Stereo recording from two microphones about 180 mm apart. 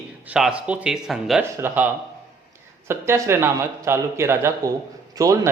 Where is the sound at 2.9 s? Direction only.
15° right (ahead or behind).